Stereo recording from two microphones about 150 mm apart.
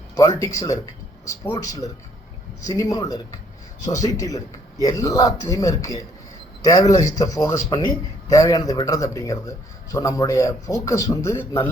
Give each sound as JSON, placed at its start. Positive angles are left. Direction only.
{"t": 0.2, "sound": "a man's voice", "side_deg": 20}